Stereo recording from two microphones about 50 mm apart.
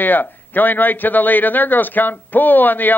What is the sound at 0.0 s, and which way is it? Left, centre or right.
A man's voice, left.